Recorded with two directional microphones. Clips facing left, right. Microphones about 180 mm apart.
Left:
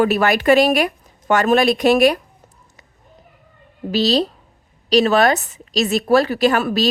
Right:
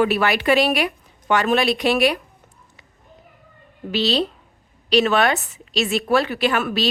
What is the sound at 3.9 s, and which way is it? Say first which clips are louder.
A woman's voice: left 4 dB; 40° left (ahead or behind).